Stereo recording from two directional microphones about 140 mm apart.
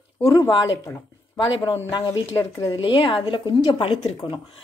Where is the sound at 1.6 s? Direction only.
25° left (ahead or behind).